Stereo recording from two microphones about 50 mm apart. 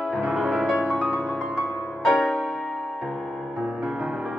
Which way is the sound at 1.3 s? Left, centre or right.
Right.